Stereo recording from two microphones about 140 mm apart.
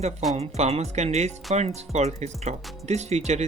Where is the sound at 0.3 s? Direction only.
50° right (ahead or behind).